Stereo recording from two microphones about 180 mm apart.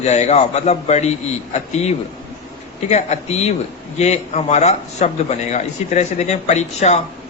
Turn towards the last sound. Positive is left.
turn(degrees=40)  # may be behind; listen again after turning